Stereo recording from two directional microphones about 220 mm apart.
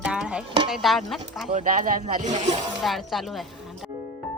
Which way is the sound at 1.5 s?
35° right (ahead or behind).